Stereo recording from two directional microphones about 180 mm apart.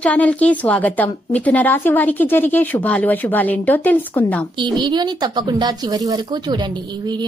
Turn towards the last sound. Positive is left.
turn(degrees=-25)  # may be behind; listen again after turning